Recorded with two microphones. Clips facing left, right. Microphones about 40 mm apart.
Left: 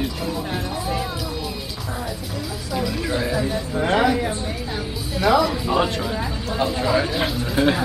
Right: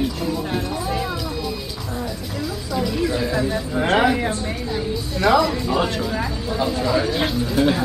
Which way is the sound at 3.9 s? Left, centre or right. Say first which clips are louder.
Right 1 dB; centre.